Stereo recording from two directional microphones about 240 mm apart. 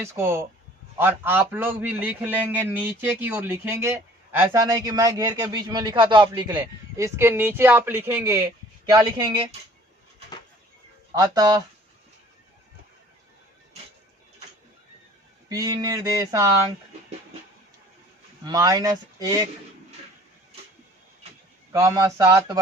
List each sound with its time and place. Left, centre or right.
0.0 s a man's voice: centre
11.1 s a man's voice: centre
15.4 s a man's voice: centre
18.4 s a man's voice: centre
21.7 s a man's voice: centre